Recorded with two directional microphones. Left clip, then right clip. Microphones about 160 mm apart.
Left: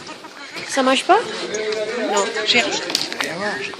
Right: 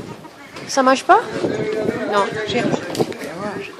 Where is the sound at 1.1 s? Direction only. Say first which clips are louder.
Right 2 dB; 5° right (ahead or behind).